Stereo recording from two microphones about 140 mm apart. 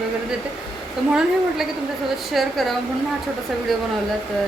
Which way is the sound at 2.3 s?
Centre (ahead or behind).